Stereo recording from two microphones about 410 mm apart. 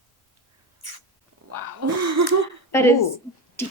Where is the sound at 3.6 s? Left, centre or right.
Centre.